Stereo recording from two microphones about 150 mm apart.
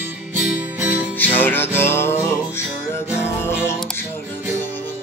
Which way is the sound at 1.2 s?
10° left (ahead or behind).